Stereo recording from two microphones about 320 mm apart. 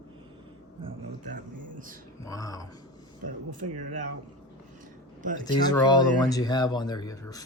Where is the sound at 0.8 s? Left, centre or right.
Right.